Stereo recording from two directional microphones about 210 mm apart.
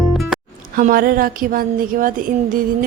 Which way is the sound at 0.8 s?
40° right (ahead or behind).